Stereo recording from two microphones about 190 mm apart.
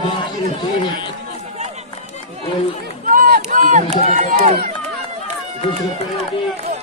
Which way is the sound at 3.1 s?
45° right (ahead or behind).